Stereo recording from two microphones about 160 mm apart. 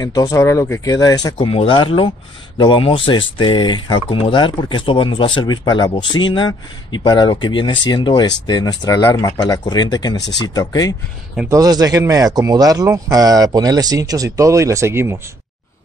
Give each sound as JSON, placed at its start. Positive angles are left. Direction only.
{"t": 0.0, "sound": "speech", "side_deg": 20}
{"t": 11.4, "sound": "speech", "side_deg": -20}